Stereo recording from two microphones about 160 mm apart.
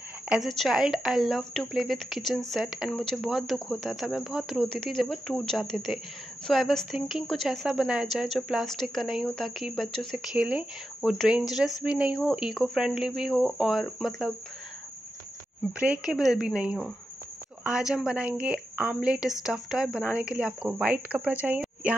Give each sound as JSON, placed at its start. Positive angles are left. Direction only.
{"t": 0.3, "sound": "speech", "side_deg": 0}
{"t": 15.8, "sound": "speech", "side_deg": -5}